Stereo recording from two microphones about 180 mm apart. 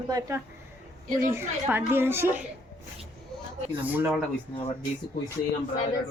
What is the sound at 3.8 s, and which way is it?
Speech, 10° right (ahead or behind).